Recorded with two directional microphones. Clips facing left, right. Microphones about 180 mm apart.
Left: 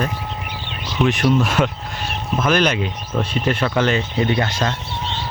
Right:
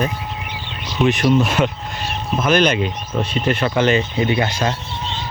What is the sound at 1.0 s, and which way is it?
Speech, 5° right (ahead or behind).